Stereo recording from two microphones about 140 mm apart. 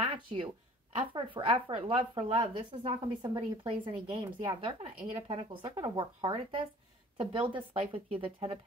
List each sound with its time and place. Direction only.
0.0 s speech: 45° right (ahead or behind)